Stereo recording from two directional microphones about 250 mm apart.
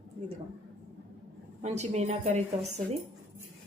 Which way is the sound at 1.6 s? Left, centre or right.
Right.